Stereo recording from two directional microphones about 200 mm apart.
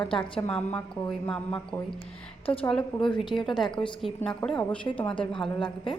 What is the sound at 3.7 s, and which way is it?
Speech, 25° left (ahead or behind).